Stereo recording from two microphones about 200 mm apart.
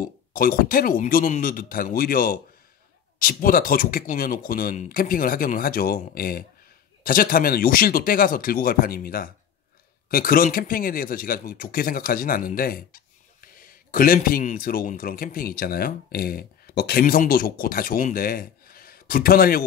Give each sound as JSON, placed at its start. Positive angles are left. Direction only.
{"t": 0.0, "sound": "speech", "side_deg": 45}